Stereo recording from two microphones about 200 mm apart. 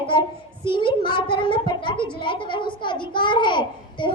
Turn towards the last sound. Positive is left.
turn(degrees=25)  # may be behind; listen again after turning